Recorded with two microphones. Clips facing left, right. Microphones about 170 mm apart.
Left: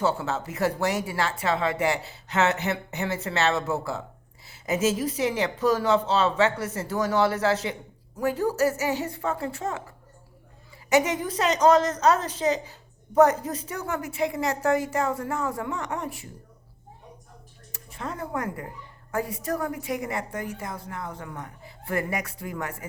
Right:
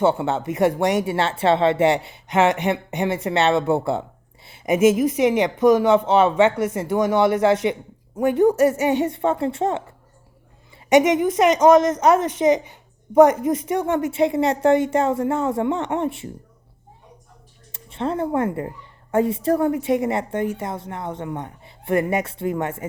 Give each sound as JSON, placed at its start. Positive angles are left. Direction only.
{"t": 0.0, "sound": "a woman's voice", "side_deg": -25}
{"t": 4.6, "sound": "a woman's voice", "side_deg": -15}
{"t": 6.7, "sound": "a woman's voice", "side_deg": -10}
{"t": 11.4, "sound": "a woman's voice", "side_deg": -10}
{"t": 13.5, "sound": "a woman's voice", "side_deg": -25}
{"t": 17.7, "sound": "a woman's voice", "side_deg": -25}